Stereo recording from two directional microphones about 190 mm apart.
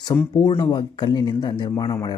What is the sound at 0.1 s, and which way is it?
Speech, 15° left (ahead or behind).